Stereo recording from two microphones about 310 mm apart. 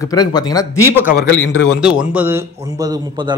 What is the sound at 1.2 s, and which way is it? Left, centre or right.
Speech, left.